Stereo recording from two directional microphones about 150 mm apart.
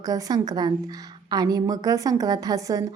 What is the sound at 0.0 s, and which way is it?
A woman's voice, 25° right (ahead or behind).